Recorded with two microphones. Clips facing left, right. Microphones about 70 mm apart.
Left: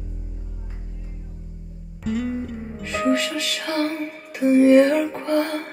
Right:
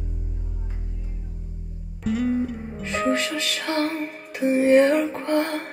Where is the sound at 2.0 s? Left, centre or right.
Centre.